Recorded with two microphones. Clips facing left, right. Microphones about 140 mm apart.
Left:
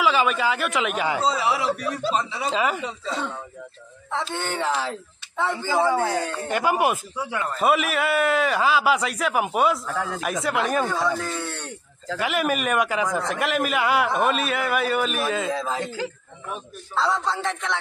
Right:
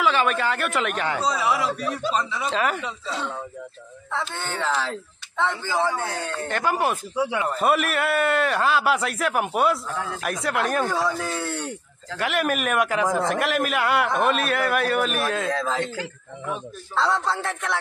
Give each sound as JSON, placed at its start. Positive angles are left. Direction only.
{"t": 0.0, "sound": "a man's voice", "side_deg": 5}
{"t": 1.2, "sound": "a man's voice", "side_deg": 25}
{"t": 2.5, "sound": "a man's voice", "side_deg": 5}
{"t": 4.5, "sound": "speech", "side_deg": 15}
{"t": 7.2, "sound": "a man's voice", "side_deg": -15}
{"t": 7.6, "sound": "a man's voice", "side_deg": 0}
{"t": 16.9, "sound": "a man's voice", "side_deg": 0}